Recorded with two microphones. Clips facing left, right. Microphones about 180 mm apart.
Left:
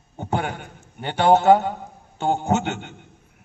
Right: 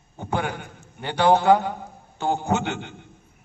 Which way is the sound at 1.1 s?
25° left (ahead or behind).